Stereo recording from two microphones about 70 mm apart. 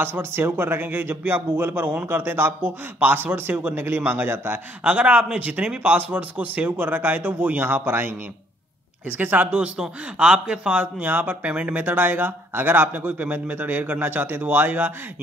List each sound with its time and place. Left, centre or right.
0.0 s a man's voice: right
9.1 s a man's voice: right